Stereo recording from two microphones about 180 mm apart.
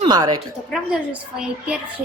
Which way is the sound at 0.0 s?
20° right (ahead or behind).